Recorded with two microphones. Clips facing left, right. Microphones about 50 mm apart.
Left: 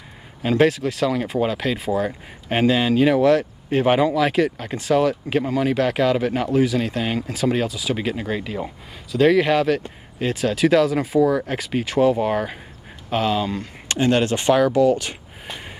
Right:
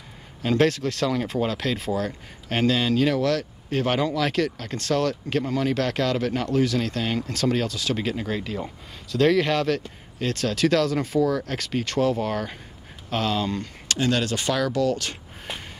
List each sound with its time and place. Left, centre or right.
0.4 s speech: centre
13.8 s speech: left